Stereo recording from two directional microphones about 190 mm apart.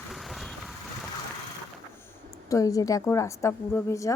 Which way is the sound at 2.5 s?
20° left (ahead or behind).